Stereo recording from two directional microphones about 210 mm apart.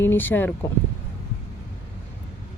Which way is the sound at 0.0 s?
10° left (ahead or behind).